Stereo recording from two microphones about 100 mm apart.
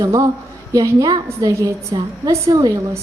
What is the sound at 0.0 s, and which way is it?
A woman's voice, 35° right (ahead or behind).